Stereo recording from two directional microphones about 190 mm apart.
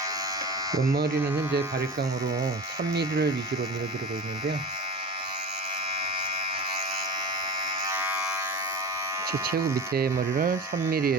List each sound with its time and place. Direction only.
2.9 s speech: 60° right (ahead or behind)
7.9 s electric shaver: 10° right (ahead or behind)
9.9 s speech: 55° right (ahead or behind)